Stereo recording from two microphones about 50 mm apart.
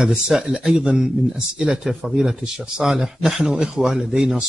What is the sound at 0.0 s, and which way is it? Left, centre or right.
Speech, centre.